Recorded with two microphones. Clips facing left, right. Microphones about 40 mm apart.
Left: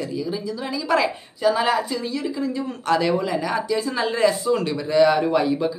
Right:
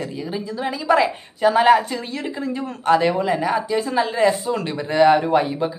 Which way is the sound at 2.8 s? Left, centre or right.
Right.